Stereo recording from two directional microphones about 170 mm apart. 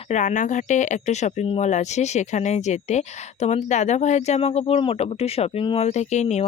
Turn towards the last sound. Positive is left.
turn(degrees=40)  # may be behind; listen again after turning